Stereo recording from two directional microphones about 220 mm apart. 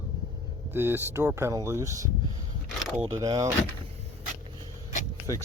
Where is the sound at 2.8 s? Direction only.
Centre (ahead or behind).